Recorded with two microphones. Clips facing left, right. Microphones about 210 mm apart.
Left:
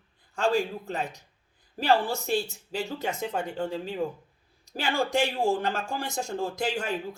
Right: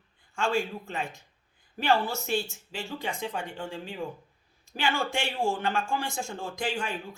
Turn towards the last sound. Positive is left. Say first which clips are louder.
# left 3 dB
turn(degrees=40)  # may be behind; listen again after turning